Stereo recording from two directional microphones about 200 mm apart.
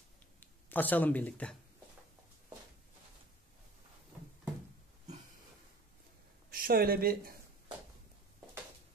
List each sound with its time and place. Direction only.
0.4 s speech: 10° left (ahead or behind)
6.5 s speech: 50° right (ahead or behind)